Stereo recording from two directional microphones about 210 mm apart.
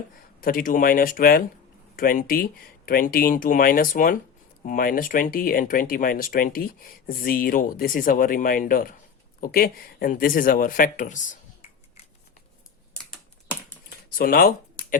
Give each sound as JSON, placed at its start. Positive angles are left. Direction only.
{"t": 0.4, "sound": "speech", "side_deg": 40}
{"t": 14.2, "sound": "speech", "side_deg": 45}